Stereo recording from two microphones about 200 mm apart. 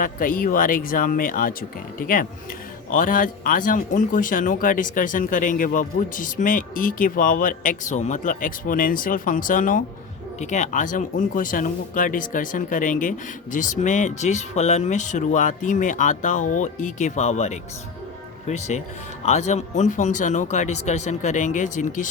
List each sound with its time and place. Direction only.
0.0 s speech: 45° left (ahead or behind)